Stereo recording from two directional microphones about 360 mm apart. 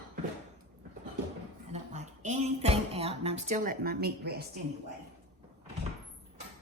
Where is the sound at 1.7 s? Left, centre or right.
Centre.